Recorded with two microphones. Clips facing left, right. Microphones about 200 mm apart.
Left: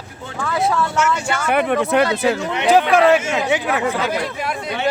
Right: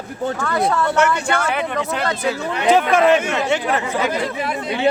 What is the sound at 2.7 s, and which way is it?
Speech, 5° left (ahead or behind).